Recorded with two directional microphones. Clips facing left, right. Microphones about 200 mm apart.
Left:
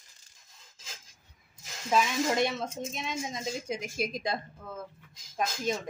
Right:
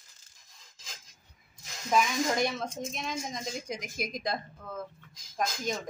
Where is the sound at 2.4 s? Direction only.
25° left (ahead or behind).